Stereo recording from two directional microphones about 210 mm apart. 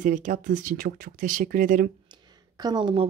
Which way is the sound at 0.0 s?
35° right (ahead or behind).